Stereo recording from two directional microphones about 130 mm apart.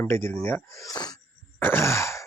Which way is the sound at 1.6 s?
15° left (ahead or behind).